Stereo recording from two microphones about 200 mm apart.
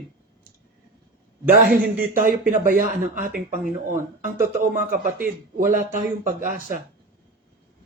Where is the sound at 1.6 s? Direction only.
45° right (ahead or behind).